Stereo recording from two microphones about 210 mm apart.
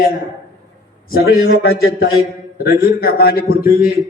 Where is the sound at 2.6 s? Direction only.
45° left (ahead or behind).